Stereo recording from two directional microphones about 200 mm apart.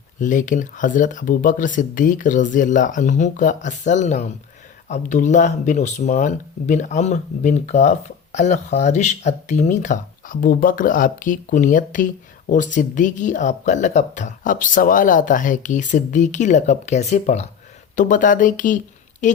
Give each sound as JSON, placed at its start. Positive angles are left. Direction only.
{"t": 0.2, "sound": "a woman's voice", "side_deg": 40}